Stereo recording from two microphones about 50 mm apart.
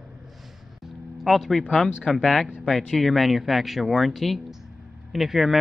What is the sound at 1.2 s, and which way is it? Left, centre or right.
Speech, centre.